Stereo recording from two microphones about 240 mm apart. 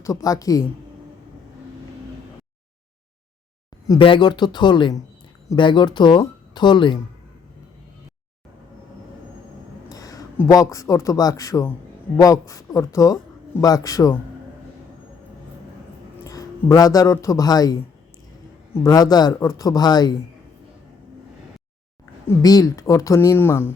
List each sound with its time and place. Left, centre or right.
0.0 s a man's voice: centre
3.8 s speech: centre
9.9 s a man's voice: centre
16.2 s a man's voice: centre
22.3 s a man's voice: centre